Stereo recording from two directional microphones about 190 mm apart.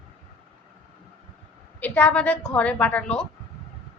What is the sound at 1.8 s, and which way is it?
A woman's voice, 5° left (ahead or behind).